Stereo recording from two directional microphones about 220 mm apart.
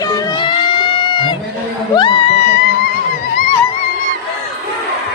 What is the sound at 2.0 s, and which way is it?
Music, 25° left (ahead or behind).